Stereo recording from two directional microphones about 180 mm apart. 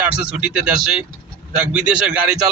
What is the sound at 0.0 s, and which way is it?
A man's voice, 5° right (ahead or behind).